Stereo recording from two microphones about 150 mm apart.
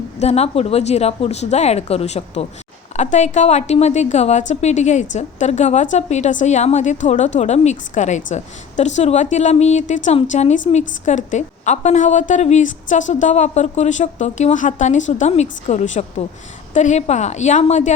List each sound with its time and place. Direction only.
0.2 s a woman's voice: 45° left (ahead or behind)